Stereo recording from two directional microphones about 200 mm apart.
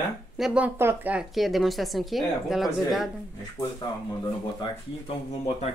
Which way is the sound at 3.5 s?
20° left (ahead or behind).